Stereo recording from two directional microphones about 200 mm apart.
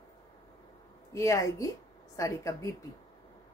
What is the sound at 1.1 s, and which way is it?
A woman's voice, 15° left (ahead or behind).